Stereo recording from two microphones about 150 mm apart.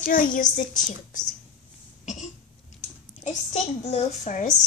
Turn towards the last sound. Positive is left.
turn(degrees=55)  # may be behind; listen again after turning